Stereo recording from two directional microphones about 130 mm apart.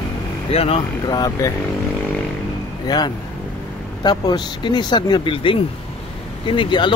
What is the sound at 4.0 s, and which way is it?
Speech, 35° left (ahead or behind).